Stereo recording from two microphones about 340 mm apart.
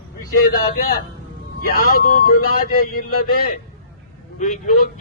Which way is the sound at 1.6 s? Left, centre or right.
Left.